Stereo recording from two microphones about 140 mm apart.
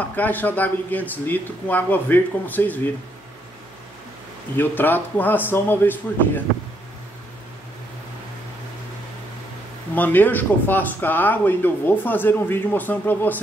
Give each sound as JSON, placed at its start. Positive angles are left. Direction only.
{"t": 0.1, "sound": "speech", "side_deg": 10}
{"t": 4.6, "sound": "speech", "side_deg": 15}
{"t": 9.9, "sound": "speech", "side_deg": 15}